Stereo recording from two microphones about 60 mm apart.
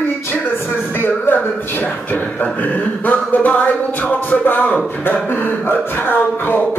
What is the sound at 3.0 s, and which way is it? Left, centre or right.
Speech, left.